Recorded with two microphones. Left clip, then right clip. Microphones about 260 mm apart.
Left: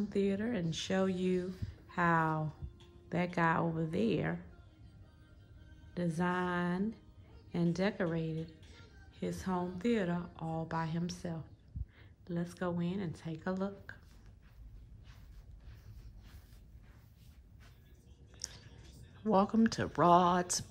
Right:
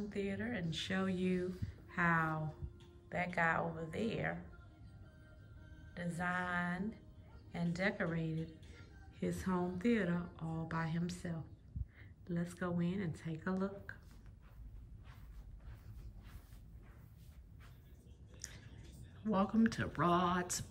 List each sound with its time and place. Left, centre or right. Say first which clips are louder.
0.1 s a woman's voice: left 7 dB; centre
5.9 s a woman's voice: left 4 dB; centre
18.4 s a sound: left 6 dB; centre
19.2 s a woman's voice: left 5 dB; centre